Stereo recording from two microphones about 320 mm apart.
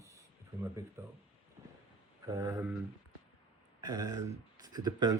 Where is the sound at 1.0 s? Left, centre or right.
Centre.